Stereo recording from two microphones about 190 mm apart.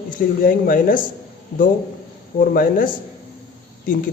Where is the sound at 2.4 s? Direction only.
50° left (ahead or behind).